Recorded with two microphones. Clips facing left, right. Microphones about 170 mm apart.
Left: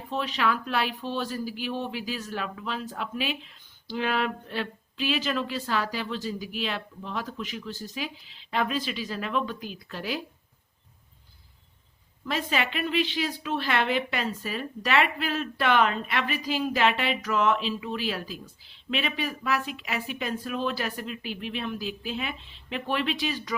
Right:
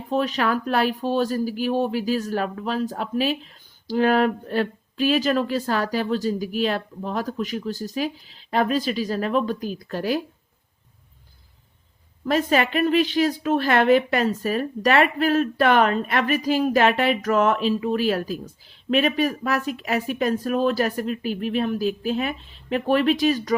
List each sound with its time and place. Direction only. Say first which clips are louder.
0.1 s speech: right 6 dB; 45° right (ahead or behind)
12.2 s speech: right 8 dB; 45° right (ahead or behind)